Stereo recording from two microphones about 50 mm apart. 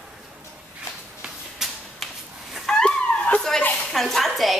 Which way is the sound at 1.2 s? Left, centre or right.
Centre.